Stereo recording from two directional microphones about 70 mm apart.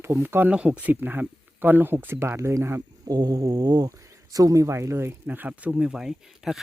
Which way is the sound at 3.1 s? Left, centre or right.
Right.